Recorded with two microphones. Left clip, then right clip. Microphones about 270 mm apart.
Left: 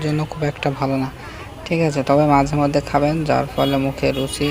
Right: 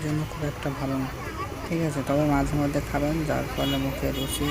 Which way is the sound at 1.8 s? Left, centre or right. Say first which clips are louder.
Left 10 dB; right.